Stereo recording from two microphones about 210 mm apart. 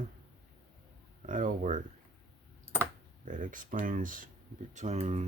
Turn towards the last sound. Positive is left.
turn(degrees=-30)  # may be behind; listen again after turning